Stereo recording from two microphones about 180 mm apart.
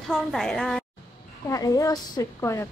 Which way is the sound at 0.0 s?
Centre (ahead or behind).